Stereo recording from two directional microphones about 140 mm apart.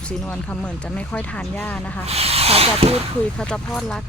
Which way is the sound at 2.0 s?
45° right (ahead or behind).